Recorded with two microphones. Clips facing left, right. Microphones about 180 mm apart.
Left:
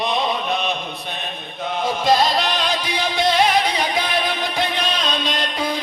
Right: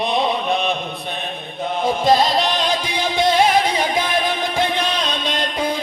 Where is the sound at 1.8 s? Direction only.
50° right (ahead or behind).